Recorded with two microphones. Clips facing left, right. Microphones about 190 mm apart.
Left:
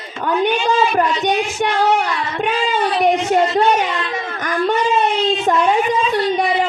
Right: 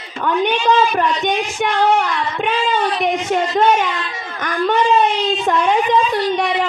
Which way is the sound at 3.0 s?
45° left (ahead or behind).